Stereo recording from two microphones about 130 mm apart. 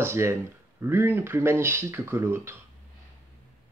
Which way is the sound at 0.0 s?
20° right (ahead or behind).